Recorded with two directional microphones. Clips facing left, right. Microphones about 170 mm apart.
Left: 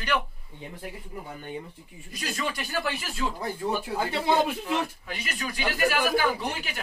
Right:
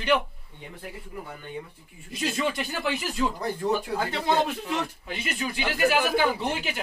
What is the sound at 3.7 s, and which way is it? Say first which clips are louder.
Speech: right 1 dB; 10° left (ahead or behind).